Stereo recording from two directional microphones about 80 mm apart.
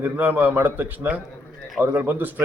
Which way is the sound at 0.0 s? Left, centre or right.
Right.